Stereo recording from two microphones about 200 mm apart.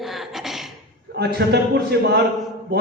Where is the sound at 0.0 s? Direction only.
Centre (ahead or behind).